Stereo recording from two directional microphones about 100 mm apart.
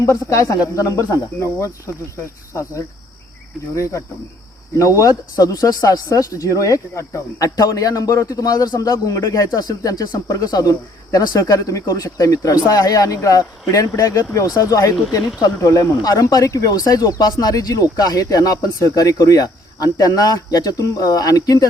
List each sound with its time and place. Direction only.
0.0 s speech: 35° left (ahead or behind)